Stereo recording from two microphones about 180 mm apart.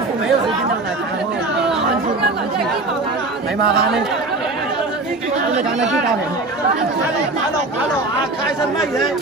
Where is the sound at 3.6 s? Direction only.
60° right (ahead or behind).